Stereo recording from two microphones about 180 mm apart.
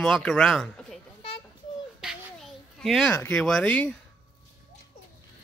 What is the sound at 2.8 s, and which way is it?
Speech, centre (ahead or behind).